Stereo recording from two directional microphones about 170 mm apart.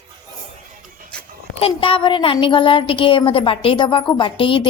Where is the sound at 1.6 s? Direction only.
35° left (ahead or behind).